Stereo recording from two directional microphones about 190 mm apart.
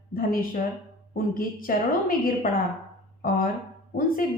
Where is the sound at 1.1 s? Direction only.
50° left (ahead or behind).